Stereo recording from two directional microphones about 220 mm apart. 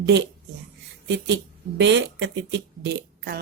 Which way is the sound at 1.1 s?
55° right (ahead or behind).